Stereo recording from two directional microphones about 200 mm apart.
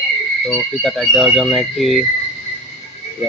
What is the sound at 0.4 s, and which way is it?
Speech, centre (ahead or behind).